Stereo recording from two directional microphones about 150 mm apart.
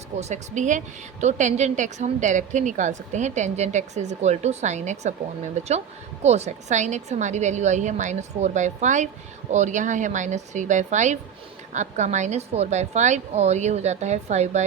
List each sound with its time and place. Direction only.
0.2 s a woman's voice: 50° right (ahead or behind)